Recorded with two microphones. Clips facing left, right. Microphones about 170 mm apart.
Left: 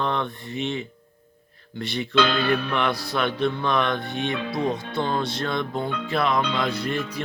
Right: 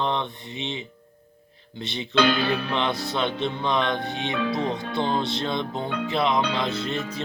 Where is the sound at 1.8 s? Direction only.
20° right (ahead or behind).